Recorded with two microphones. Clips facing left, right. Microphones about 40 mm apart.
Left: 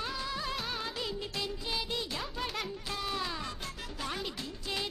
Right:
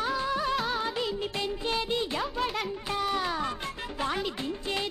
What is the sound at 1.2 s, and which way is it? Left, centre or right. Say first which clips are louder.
Music: right 6 dB; right.